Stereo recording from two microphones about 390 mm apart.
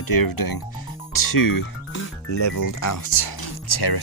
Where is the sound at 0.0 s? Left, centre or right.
Left.